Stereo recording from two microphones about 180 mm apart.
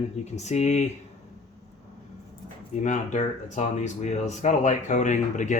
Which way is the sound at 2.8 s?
40° left (ahead or behind).